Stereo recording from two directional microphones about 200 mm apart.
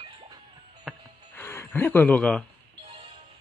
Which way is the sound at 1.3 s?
10° left (ahead or behind).